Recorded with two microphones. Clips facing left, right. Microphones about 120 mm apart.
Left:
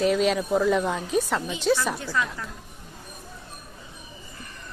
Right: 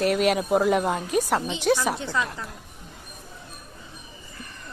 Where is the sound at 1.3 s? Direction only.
25° right (ahead or behind).